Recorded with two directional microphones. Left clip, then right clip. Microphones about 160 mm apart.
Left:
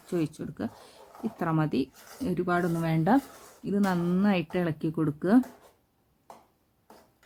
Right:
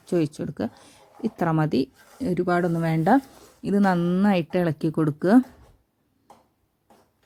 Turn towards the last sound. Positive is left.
turn(degrees=-40)  # may be behind; listen again after turning